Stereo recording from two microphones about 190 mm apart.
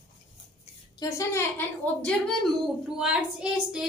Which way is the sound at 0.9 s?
15° left (ahead or behind).